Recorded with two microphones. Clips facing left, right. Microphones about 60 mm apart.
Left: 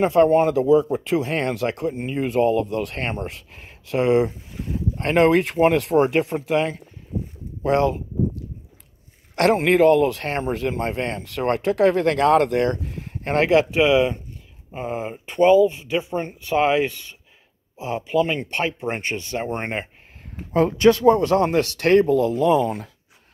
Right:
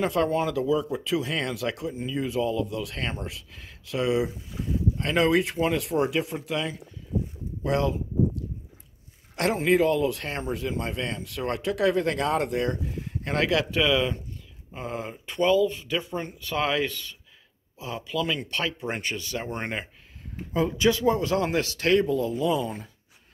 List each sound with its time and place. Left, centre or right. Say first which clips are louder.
0.0 s speech: left 8 dB; left
9.3 s speech: left 5 dB; left
20.5 s speech: left 7 dB; left